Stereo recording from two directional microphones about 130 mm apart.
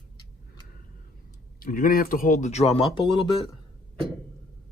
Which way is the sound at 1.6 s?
90° left.